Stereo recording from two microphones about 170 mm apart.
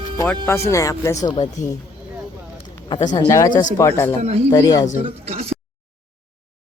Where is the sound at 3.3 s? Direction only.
20° left (ahead or behind).